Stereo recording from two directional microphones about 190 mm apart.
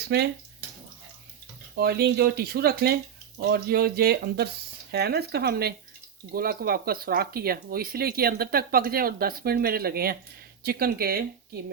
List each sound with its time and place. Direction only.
0.1 s speech: 60° right (ahead or behind)
1.7 s speech: 55° right (ahead or behind)